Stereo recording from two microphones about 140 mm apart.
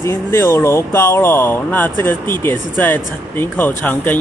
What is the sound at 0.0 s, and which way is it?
Speech, 20° left (ahead or behind).